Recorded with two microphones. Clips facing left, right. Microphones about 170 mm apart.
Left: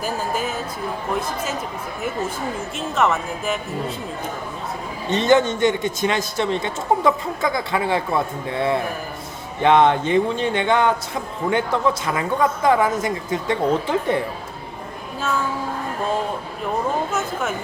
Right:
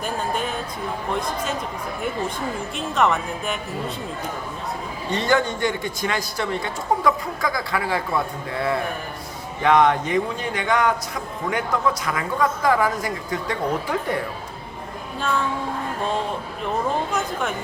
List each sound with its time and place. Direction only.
0.0 s a sound: 5° left (ahead or behind)
2.7 s speech: centre (ahead or behind)
5.0 s a man's voice: 20° left (ahead or behind)
17.1 s speech: 5° left (ahead or behind)